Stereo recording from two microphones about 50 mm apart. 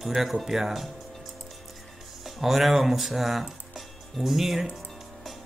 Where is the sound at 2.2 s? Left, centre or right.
Centre.